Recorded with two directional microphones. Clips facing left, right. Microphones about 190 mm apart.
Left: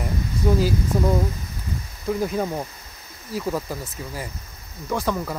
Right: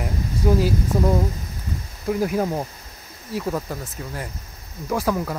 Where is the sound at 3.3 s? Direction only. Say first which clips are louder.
Even; centre (ahead or behind).